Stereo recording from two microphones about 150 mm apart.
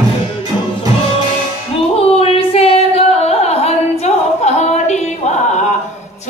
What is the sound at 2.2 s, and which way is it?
Singing, 40° left (ahead or behind).